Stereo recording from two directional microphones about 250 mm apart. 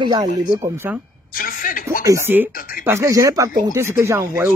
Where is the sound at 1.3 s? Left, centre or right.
Left.